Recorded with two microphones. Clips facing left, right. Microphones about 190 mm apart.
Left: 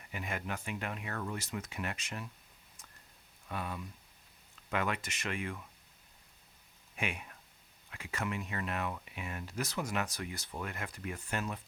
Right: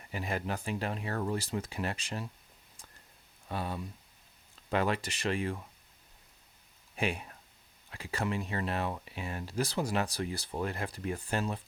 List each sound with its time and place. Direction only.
0.1 s speech: 35° right (ahead or behind)
3.5 s speech: 30° right (ahead or behind)
6.9 s speech: 35° right (ahead or behind)